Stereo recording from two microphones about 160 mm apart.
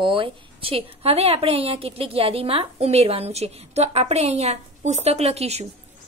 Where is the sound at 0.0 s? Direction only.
35° right (ahead or behind).